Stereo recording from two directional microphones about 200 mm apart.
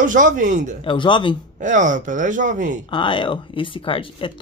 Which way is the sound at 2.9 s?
25° left (ahead or behind).